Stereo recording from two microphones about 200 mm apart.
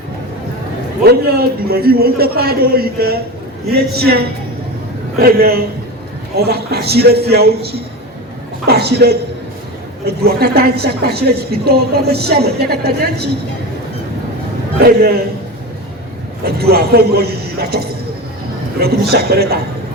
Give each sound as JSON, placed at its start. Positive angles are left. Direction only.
{"t": 1.0, "sound": "a woman's voice", "side_deg": -50}
{"t": 10.2, "sound": "a woman's voice", "side_deg": -50}
{"t": 14.8, "sound": "a woman's voice", "side_deg": -50}
{"t": 16.4, "sound": "a woman's voice", "side_deg": -50}